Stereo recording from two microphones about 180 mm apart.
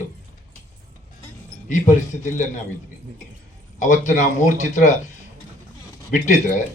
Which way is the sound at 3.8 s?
45° left (ahead or behind).